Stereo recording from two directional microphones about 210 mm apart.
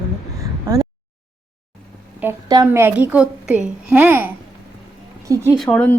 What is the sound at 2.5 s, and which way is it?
A woman's voice, 15° right (ahead or behind).